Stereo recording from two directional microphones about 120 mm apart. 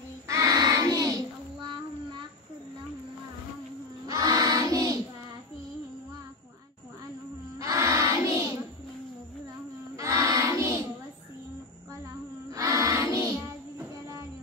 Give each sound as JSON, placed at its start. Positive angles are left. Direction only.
{"t": 0.3, "sound": "child singing", "side_deg": -30}
{"t": 4.1, "sound": "choir", "side_deg": -30}
{"t": 7.5, "sound": "crowd", "side_deg": -25}
{"t": 9.9, "sound": "child singing", "side_deg": -25}
{"t": 12.4, "sound": "a sound", "side_deg": -25}